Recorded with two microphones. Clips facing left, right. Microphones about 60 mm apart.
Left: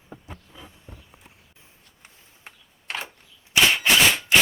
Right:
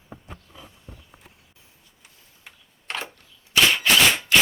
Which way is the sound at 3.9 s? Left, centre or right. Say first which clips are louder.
Even; left.